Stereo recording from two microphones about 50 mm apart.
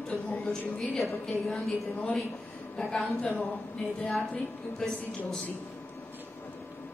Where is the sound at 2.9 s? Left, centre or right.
Centre.